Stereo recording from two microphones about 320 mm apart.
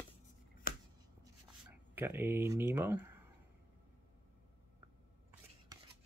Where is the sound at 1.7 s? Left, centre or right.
Centre.